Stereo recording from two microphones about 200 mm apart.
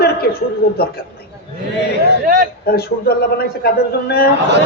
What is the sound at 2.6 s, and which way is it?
A man's voice, 50° left (ahead or behind).